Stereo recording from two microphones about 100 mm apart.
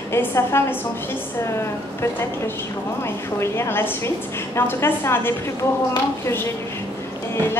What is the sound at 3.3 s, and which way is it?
A woman's voice, 25° left (ahead or behind).